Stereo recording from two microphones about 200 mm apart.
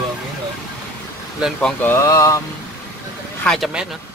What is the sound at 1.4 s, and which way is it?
Speech, 5° left (ahead or behind).